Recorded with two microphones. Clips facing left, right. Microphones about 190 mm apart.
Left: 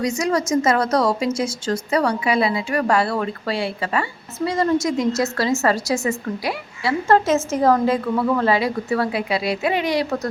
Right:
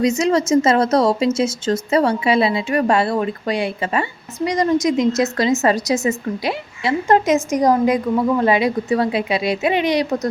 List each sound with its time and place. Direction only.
0.0 s a woman's voice: 25° right (ahead or behind)